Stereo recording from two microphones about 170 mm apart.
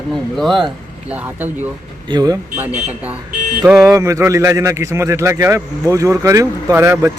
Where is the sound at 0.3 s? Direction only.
Centre (ahead or behind).